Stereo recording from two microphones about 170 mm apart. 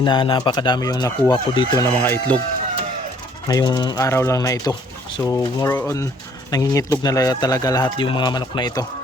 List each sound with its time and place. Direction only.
0.0 s speech: 30° left (ahead or behind)
2.0 s speech: 10° left (ahead or behind)
3.5 s speech: 25° left (ahead or behind)